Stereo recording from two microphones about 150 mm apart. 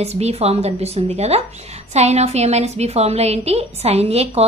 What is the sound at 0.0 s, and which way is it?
A woman's voice, 45° right (ahead or behind).